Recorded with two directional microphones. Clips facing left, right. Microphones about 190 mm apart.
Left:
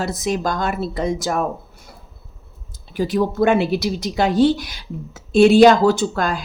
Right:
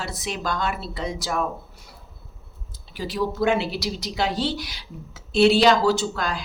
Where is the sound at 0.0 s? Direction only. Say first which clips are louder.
Left 8 dB; 45° left (ahead or behind).